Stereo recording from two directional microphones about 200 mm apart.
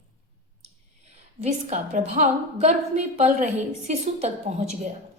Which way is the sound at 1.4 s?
35° right (ahead or behind).